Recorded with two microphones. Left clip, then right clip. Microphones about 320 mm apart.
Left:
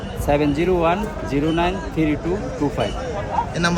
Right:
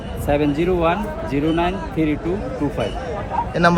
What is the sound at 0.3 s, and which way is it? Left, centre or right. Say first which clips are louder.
A man's voice: even; centre.